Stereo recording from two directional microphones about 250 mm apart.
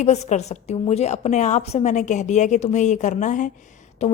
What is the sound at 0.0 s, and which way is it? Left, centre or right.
A woman's voice, left.